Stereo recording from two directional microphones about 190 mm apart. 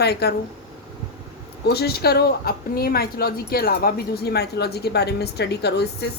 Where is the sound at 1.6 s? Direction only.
55° left (ahead or behind).